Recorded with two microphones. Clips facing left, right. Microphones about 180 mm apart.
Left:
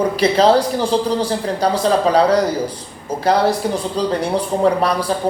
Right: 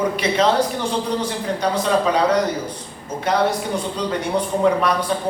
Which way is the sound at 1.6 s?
35° left (ahead or behind).